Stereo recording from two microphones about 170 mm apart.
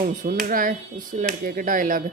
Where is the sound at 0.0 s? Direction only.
55° right (ahead or behind).